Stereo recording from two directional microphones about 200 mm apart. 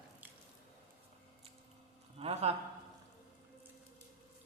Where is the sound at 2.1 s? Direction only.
30° right (ahead or behind).